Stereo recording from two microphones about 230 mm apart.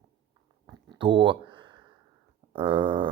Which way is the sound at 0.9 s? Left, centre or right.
Centre.